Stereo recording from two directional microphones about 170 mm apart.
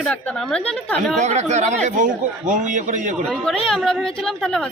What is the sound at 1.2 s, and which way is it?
A man's voice, 40° right (ahead or behind).